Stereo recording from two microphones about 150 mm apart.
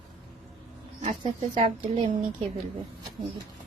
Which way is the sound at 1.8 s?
35° right (ahead or behind).